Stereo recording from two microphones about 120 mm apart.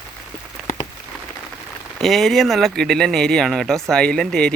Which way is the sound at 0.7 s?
90° left.